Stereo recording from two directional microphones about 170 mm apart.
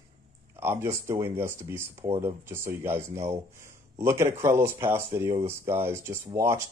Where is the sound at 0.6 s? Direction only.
15° right (ahead or behind).